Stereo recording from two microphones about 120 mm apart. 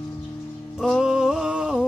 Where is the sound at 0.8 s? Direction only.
Centre (ahead or behind).